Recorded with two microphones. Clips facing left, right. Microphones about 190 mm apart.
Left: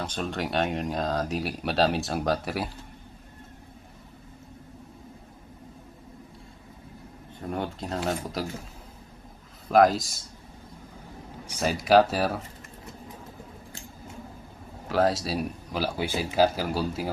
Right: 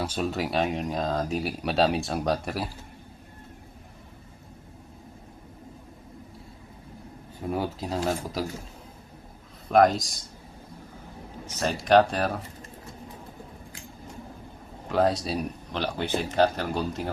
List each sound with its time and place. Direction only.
0.0 s speech: 5° right (ahead or behind)
7.4 s speech: 5° right (ahead or behind)
9.6 s speech: centre (ahead or behind)
11.4 s speech: 5° left (ahead or behind)
14.8 s speech: centre (ahead or behind)